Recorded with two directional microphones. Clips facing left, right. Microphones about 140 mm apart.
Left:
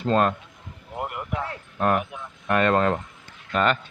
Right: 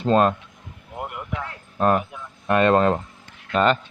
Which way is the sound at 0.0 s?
20° right (ahead or behind).